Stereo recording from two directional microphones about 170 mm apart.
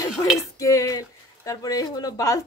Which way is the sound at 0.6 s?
20° left (ahead or behind).